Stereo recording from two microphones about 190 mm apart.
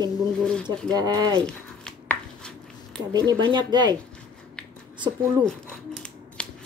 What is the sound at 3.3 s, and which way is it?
Speech, 25° right (ahead or behind).